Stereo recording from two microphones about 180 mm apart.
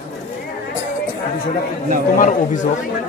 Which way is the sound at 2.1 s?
45° left (ahead or behind).